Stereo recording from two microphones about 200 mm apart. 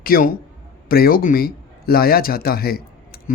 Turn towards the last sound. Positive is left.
turn(degrees=50)  # may be behind; listen again after turning